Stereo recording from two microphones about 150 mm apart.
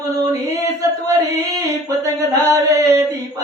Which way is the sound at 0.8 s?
20° right (ahead or behind).